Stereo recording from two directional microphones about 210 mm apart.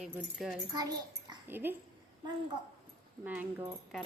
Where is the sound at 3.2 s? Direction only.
10° right (ahead or behind).